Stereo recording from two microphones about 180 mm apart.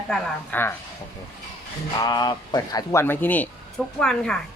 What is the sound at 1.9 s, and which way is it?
Speech, 20° left (ahead or behind).